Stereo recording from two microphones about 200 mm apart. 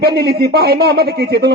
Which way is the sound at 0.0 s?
55° right (ahead or behind).